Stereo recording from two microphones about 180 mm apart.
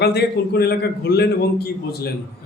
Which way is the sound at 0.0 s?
60° left (ahead or behind).